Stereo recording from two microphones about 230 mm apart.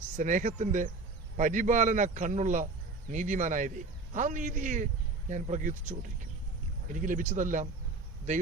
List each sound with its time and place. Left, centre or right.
0.2 s a man's voice: right